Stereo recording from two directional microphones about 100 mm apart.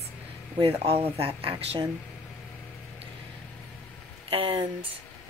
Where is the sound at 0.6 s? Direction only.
75° right (ahead or behind).